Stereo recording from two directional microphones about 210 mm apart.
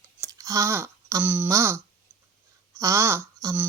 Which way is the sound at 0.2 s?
15° right (ahead or behind).